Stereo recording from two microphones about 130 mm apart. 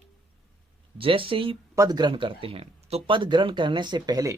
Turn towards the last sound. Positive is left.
turn(degrees=-30)  # may be behind; listen again after turning